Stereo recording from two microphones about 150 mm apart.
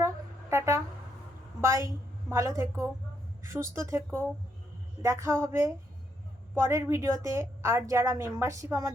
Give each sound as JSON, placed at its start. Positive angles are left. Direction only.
{"t": 0.5, "sound": "a woman's voice", "side_deg": -20}